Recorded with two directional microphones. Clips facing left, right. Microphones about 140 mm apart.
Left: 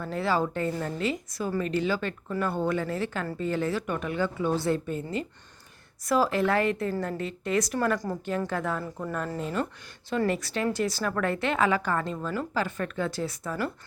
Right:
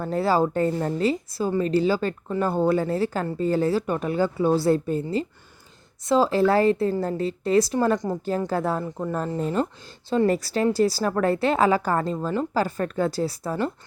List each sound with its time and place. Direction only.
0.0 s a woman's voice: 35° right (ahead or behind); by 8.2 s 20° right (ahead or behind)
8.4 s speech: 35° right (ahead or behind)
8.8 s a woman's voice: 20° right (ahead or behind)
9.1 s speech: 30° right (ahead or behind)